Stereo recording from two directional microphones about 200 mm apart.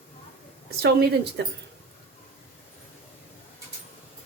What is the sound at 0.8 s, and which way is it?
Speech, 55° right (ahead or behind).